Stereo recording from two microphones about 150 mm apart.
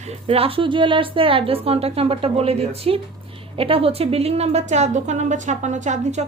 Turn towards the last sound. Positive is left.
turn(degrees=-55)  # may be behind; listen again after turning